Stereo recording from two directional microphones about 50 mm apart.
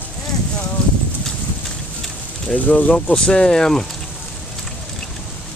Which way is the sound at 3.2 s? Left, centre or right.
Centre.